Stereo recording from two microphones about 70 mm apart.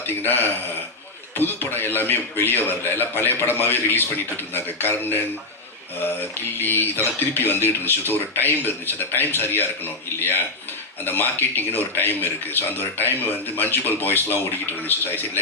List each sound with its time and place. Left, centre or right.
0.1 s speech: left
6.6 s speech: left